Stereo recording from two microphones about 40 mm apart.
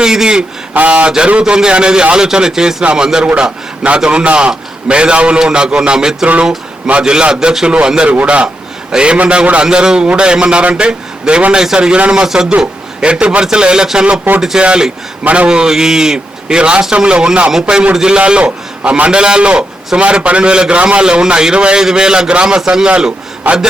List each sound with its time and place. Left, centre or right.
0.0 s a man's voice: centre
0.7 s a man's voice: right
8.0 s a man's voice: right
8.9 s a man's voice: right
15.4 s a man's voice: centre
23.5 s a man's voice: right